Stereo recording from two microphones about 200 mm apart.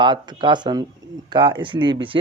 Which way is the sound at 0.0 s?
25° right (ahead or behind).